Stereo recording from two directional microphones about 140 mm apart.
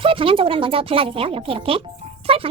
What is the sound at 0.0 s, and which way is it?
Speech, 40° right (ahead or behind).